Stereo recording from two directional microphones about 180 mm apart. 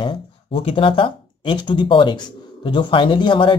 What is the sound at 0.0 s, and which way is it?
Speech, 30° left (ahead or behind).